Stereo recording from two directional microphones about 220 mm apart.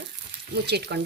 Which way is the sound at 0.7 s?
50° right (ahead or behind).